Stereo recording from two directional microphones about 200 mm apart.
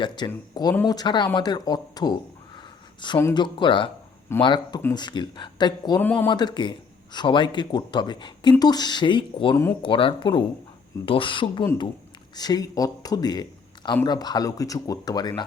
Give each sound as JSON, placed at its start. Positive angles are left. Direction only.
{"t": 0.3, "sound": "speech", "side_deg": 15}
{"t": 6.0, "sound": "speech", "side_deg": 10}
{"t": 6.3, "sound": "speech", "side_deg": 20}